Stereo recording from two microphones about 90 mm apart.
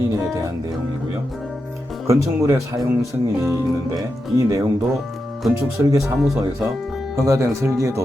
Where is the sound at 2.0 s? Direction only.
35° right (ahead or behind).